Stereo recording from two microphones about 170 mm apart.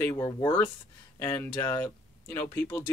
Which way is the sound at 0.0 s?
20° left (ahead or behind).